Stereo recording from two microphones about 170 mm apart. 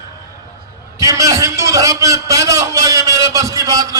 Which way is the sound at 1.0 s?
20° right (ahead or behind).